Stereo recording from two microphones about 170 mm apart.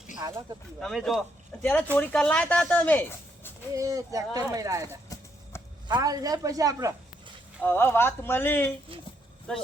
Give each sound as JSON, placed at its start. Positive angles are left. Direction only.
{"t": 0.2, "sound": "speech", "side_deg": -20}
{"t": 0.8, "sound": "speech", "side_deg": 0}
{"t": 3.8, "sound": "speech", "side_deg": -20}
{"t": 7.6, "sound": "speech", "side_deg": 10}